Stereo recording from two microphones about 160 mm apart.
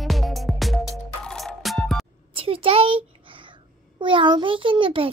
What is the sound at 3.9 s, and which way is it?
A child's voice, 30° right (ahead or behind).